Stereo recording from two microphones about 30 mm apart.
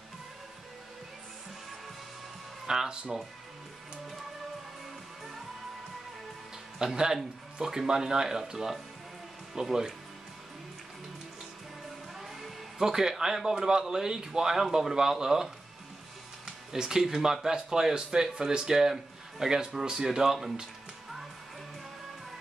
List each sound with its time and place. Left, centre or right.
2.6 s music: centre
6.8 s speech: right
12.2 s music: centre
12.7 s speech: centre
16.7 s speech: centre